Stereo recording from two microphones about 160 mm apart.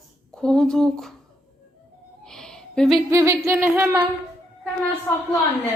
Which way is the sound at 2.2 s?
5° left (ahead or behind).